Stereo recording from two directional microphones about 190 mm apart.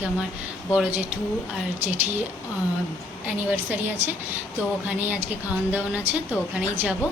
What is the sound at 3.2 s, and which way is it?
A woman's voice, 10° right (ahead or behind).